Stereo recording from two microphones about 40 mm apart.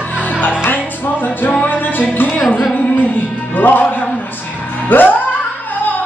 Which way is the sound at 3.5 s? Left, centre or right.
Left.